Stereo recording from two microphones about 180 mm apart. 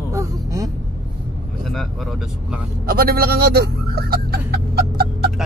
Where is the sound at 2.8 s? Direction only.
55° right (ahead or behind).